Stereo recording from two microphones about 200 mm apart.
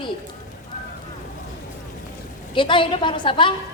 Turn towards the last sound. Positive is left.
turn(degrees=25)  # may be behind; listen again after turning